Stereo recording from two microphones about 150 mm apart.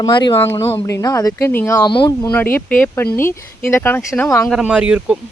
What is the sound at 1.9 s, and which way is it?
Speech, 30° left (ahead or behind).